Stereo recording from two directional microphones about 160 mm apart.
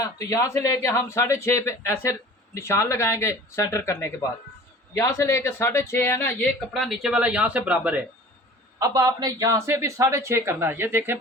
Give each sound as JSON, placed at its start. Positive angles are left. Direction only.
{"t": 0.0, "sound": "speech", "side_deg": 20}
{"t": 6.7, "sound": "speech", "side_deg": 0}
{"t": 8.8, "sound": "speech", "side_deg": -20}